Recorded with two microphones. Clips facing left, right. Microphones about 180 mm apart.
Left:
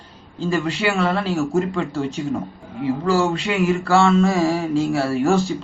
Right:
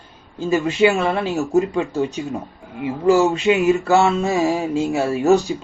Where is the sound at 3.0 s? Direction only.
20° right (ahead or behind).